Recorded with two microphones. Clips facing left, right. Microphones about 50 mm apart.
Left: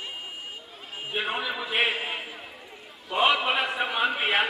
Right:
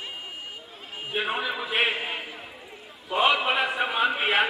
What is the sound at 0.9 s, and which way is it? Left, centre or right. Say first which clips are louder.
A man's voice: right 1 dB; centre.